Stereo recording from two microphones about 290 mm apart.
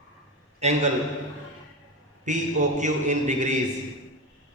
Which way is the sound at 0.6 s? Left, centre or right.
Right.